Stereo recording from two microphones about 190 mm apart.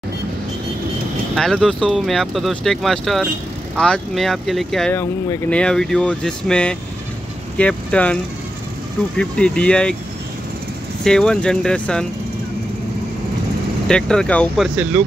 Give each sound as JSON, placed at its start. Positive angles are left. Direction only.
{"t": 1.3, "sound": "speech", "side_deg": 5}
{"t": 11.1, "sound": "speech", "side_deg": 5}
{"t": 13.8, "sound": "speech", "side_deg": 5}